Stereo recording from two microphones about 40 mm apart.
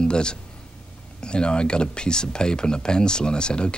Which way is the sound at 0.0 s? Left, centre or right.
Left.